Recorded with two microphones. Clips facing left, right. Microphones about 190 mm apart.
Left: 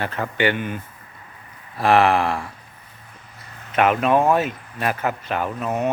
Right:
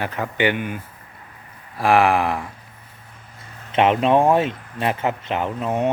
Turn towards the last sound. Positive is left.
turn(degrees=-25)  # may be behind; listen again after turning